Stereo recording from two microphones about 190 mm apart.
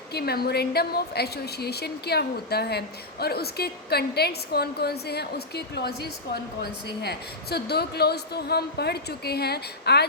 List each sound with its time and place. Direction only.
0.1 s a woman's voice: 55° left (ahead or behind)